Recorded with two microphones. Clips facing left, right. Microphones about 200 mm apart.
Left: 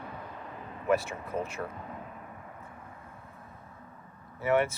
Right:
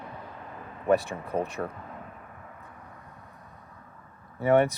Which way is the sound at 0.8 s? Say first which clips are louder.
Right 4 dB; 35° right (ahead or behind).